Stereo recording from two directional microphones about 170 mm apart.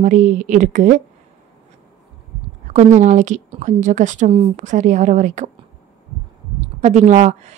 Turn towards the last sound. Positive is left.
turn(degrees=-45)  # may be behind; listen again after turning